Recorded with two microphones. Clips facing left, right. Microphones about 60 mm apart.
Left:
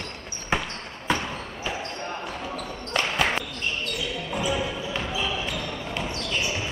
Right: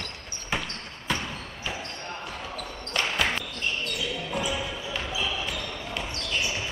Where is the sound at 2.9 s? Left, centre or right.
Centre.